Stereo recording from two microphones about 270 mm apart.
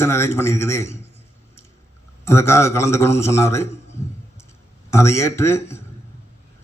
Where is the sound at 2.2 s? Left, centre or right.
Centre.